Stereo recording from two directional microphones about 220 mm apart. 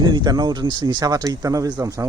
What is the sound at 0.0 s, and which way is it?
Speech, 20° right (ahead or behind).